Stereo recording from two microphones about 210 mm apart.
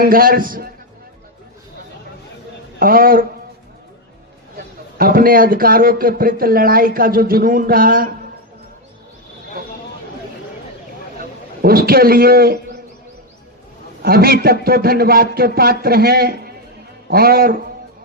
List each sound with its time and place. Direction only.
0.0 s a man's voice: 45° right (ahead or behind)
2.7 s a man's voice: 45° right (ahead or behind)
4.5 s a man's voice: 45° right (ahead or behind)
11.6 s a man's voice: 45° right (ahead or behind)
14.0 s a man's voice: 45° right (ahead or behind)